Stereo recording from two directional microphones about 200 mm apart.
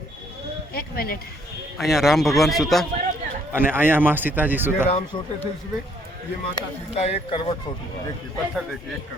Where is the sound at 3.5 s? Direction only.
10° right (ahead or behind).